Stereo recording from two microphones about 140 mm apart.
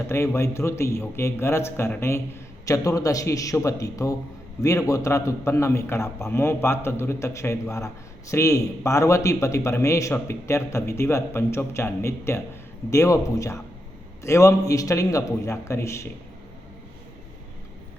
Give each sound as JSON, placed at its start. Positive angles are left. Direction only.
{"t": 0.1, "sound": "a man's voice", "side_deg": 20}